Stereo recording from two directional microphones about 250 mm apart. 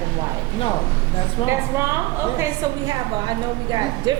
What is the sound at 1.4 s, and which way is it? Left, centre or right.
Speech, centre.